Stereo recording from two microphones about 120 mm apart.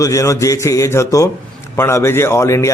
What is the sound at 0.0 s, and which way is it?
A man's voice, 25° left (ahead or behind).